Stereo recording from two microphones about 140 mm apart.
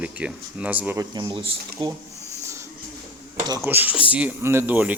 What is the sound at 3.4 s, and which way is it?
Speech, 25° right (ahead or behind).